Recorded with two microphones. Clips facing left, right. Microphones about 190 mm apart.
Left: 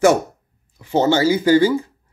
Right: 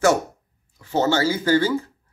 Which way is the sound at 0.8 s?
20° left (ahead or behind).